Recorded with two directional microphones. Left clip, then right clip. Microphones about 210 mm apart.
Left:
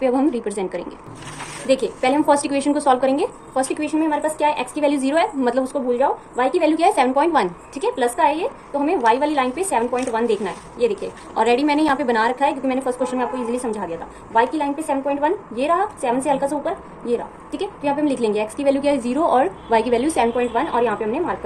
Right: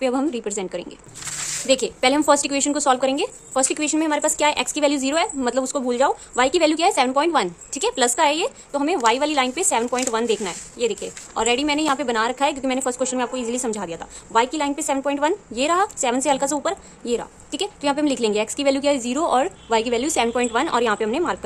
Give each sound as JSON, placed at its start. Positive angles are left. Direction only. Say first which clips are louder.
{"t": 0.0, "sound": "speech", "louder": "left 3 dB", "side_deg": -35}
{"t": 5.7, "sound": "a woman's voice", "louder": "left 1 dB", "side_deg": -50}